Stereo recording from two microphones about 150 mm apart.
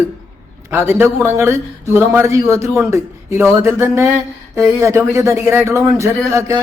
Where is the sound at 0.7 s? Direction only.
15° right (ahead or behind).